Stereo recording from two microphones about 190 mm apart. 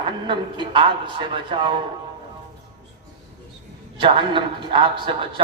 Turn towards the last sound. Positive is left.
turn(degrees=-25)  # may be behind; listen again after turning